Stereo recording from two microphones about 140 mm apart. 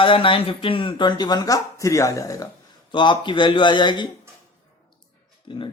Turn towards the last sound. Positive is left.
turn(degrees=35)  # may be behind; listen again after turning